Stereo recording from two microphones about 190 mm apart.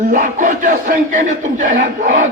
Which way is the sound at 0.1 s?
45° right (ahead or behind).